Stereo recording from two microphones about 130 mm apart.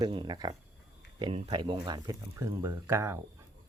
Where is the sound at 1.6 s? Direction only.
35° right (ahead or behind).